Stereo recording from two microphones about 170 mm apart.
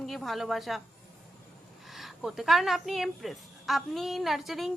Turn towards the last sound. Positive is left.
turn(degrees=0)  # may be behind; listen again after turning